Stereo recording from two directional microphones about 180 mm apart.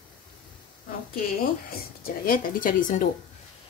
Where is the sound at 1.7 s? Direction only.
55° left (ahead or behind).